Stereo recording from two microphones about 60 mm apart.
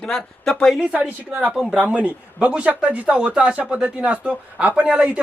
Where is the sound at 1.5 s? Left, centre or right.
Centre.